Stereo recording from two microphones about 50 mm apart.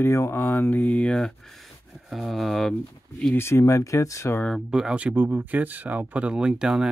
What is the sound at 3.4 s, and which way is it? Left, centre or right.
Speech, left.